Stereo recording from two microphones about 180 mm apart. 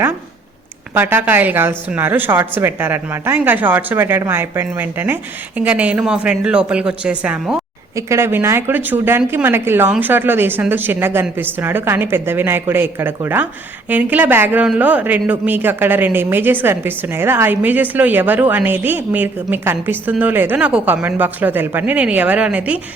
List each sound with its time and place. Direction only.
0.9 s a woman's voice: 10° right (ahead or behind)